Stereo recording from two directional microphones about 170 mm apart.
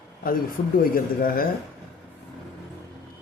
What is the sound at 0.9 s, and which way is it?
Speech, 60° left (ahead or behind).